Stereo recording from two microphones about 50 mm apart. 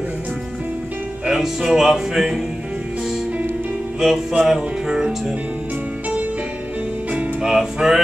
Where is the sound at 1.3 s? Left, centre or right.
Centre.